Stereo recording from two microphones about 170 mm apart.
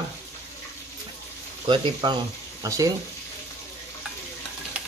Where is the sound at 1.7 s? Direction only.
25° right (ahead or behind).